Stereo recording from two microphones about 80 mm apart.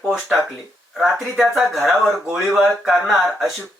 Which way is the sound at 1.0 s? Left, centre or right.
Centre.